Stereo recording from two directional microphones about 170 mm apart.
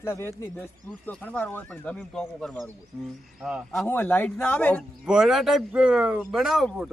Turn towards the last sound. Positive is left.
turn(degrees=0)  # may be behind; listen again after turning